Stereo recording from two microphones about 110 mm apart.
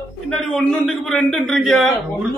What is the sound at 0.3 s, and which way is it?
A man's voice, 5° left (ahead or behind).